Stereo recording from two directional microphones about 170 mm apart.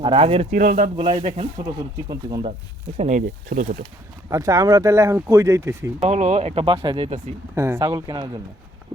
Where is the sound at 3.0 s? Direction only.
50° right (ahead or behind).